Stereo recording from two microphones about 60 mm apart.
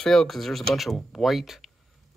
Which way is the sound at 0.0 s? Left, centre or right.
Centre.